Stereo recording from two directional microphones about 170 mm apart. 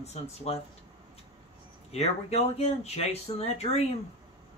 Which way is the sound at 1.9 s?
35° left (ahead or behind).